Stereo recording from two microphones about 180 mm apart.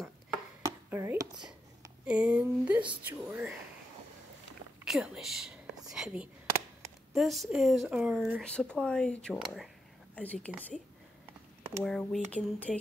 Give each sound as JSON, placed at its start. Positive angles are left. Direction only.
{"t": 0.6, "sound": "chopping", "side_deg": -15}
{"t": 2.0, "sound": "a woman's voice", "side_deg": -5}
{"t": 4.8, "sound": "speech", "side_deg": 0}
{"t": 5.9, "sound": "whispering", "side_deg": -5}
{"t": 7.2, "sound": "a woman's voice", "side_deg": 0}
{"t": 11.8, "sound": "speech", "side_deg": 0}